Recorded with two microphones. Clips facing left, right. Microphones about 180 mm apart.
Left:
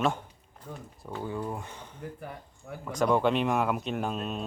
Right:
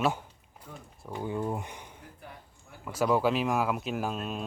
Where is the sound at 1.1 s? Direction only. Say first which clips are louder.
Right 2 dB; 15° right (ahead or behind).